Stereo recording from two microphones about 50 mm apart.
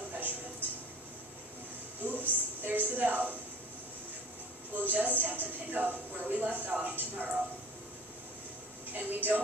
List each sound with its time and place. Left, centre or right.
0.2 s music: right
2.0 s a sound: right
4.8 s a woman's voice: right
8.9 s a woman's voice: right